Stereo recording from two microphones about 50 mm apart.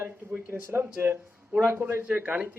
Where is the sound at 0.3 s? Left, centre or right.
Right.